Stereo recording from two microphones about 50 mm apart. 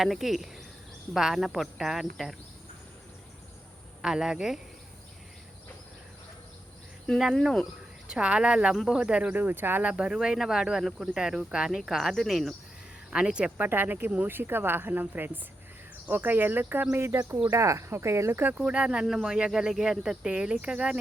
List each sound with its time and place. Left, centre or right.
0.0 s speech: centre
4.0 s speech: centre
7.4 s speech: centre
8.0 s speech: centre; by 9.8 s right
9.9 s speech: centre
13.1 s speech: centre
13.6 s speech: right
16.9 s speech: right
17.5 s speech: right
18.5 s speech: right
19.0 s speech: centre